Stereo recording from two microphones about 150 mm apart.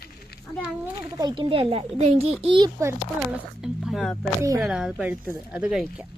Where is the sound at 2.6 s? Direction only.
20° right (ahead or behind).